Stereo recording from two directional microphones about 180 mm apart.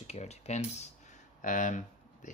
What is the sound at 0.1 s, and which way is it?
Speech, 35° left (ahead or behind).